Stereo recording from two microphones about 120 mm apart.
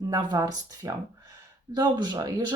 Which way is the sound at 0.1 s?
30° right (ahead or behind).